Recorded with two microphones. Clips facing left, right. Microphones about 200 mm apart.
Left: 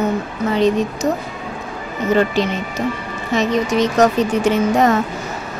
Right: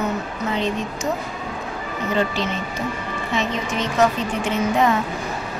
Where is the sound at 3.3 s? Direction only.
40° left (ahead or behind).